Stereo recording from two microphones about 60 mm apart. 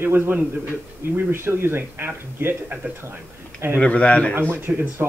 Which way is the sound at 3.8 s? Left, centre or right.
Left.